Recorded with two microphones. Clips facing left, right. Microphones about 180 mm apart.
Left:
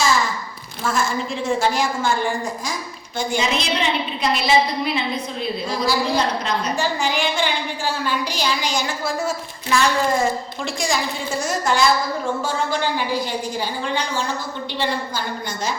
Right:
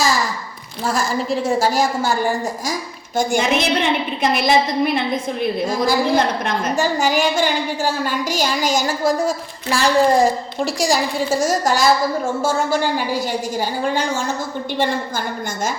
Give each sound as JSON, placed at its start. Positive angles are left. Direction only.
{"t": 0.9, "sound": "a woman's voice", "side_deg": -35}
{"t": 3.2, "sound": "a woman's voice", "side_deg": -55}